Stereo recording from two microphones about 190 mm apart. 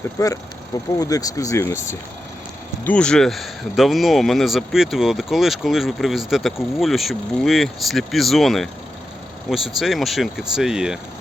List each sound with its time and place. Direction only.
0.2 s speech: 15° left (ahead or behind); by 10.9 s 5° right (ahead or behind)